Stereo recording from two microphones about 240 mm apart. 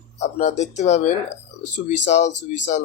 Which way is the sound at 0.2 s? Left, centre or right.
Left.